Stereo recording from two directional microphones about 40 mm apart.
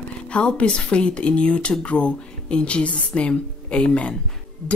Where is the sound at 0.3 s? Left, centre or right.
Left.